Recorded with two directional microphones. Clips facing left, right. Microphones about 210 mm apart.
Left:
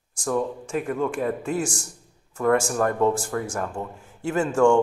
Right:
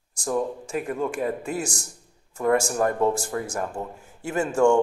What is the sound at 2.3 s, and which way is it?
Speech, 20° right (ahead or behind).